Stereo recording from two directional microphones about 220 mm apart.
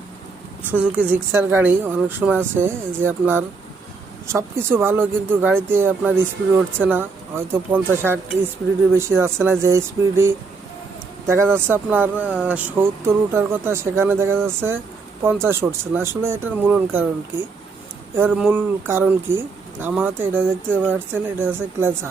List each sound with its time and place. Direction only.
0.7 s speech: 5° right (ahead or behind)